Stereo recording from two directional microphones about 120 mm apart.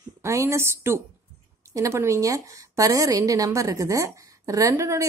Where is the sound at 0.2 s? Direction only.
25° right (ahead or behind).